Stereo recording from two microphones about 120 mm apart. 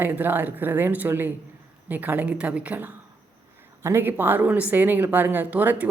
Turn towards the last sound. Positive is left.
turn(degrees=-15)  # may be behind; listen again after turning